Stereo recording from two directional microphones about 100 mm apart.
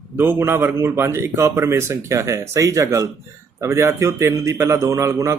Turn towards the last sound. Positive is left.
turn(degrees=-30)  # may be behind; listen again after turning